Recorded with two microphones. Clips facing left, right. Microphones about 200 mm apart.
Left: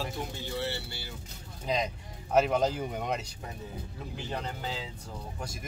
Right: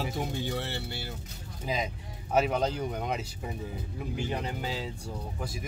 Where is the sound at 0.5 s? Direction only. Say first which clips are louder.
Right 1 dB; 55° right (ahead or behind).